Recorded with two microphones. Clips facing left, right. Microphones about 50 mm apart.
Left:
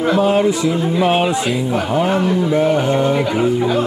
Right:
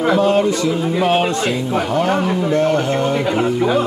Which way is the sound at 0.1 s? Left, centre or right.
Centre.